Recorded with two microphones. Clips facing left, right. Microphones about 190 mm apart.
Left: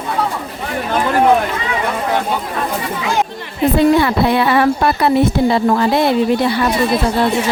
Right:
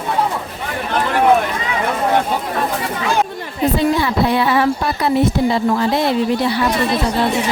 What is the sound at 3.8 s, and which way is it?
Speech, 60° left (ahead or behind).